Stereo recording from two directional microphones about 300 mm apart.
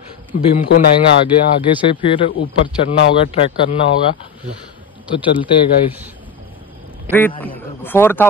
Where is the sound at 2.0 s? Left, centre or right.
Centre.